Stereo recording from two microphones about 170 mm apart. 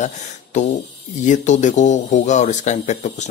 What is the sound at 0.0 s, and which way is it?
Speech, 45° left (ahead or behind).